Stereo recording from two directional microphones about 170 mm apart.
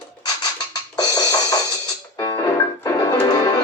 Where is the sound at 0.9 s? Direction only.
20° left (ahead or behind).